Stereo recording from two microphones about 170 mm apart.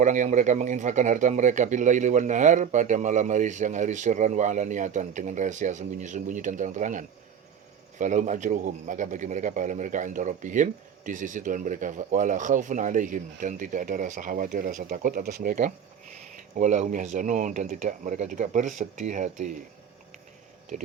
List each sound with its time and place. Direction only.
0.0 s a man's voice: 45° right (ahead or behind)
16.3 s a man's voice: 45° right (ahead or behind)